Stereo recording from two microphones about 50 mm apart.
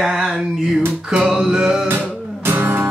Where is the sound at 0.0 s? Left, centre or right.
Centre.